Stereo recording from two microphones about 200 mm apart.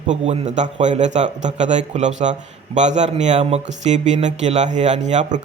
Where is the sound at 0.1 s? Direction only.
35° right (ahead or behind).